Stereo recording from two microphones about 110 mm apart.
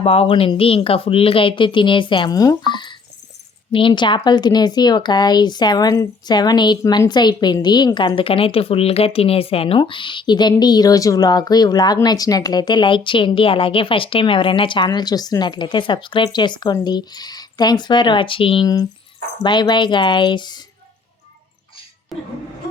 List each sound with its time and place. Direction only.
0.0 s speech: 65° left (ahead or behind)
2.3 s music: 35° left (ahead or behind)
3.7 s speech: 50° left (ahead or behind)
18.6 s speech: 35° left (ahead or behind)